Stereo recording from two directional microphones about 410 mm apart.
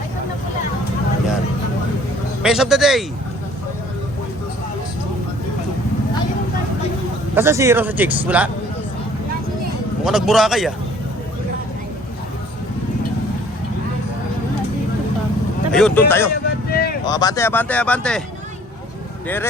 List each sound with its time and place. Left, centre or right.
2.4 s speech: centre
7.3 s speech: centre
10.0 s speech: centre
15.7 s speech: centre
16.5 s vehicle: left
17.1 s speech: centre